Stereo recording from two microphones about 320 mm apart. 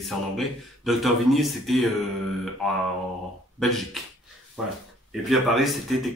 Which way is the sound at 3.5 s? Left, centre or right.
Centre.